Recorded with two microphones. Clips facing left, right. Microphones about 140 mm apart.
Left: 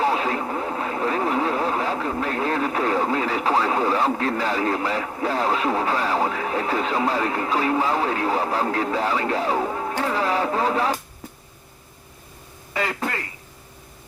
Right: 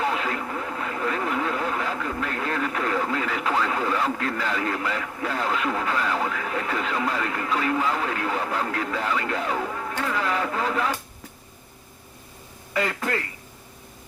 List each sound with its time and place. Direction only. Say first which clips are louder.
0.0 s speech: left 4 dB; 30° left (ahead or behind)
12.7 s speech: even; 30° left (ahead or behind)